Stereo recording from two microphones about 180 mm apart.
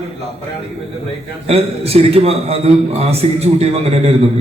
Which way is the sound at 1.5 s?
35° right (ahead or behind).